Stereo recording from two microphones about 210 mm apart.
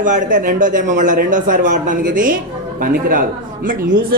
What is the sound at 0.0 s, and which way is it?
A man's voice, 40° right (ahead or behind).